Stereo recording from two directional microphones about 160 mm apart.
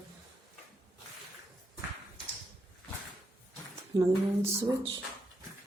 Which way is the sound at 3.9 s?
20° right (ahead or behind).